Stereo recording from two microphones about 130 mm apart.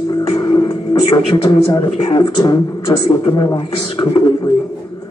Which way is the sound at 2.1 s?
30° left (ahead or behind).